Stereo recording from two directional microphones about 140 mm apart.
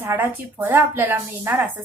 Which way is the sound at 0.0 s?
15° right (ahead or behind).